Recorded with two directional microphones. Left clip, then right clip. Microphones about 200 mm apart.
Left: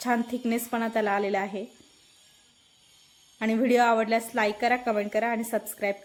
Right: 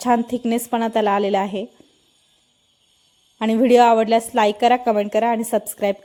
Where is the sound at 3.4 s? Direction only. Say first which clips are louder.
Right 9 dB; 35° right (ahead or behind).